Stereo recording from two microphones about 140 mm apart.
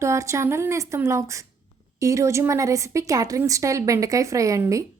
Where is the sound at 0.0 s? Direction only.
20° right (ahead or behind).